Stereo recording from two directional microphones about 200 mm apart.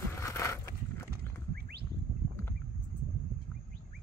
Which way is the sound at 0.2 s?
15° left (ahead or behind).